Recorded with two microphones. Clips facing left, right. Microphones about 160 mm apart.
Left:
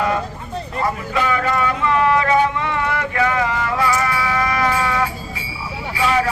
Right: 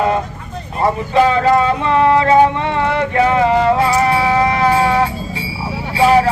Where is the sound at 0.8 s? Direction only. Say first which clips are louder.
Right 8 dB; 30° right (ahead or behind).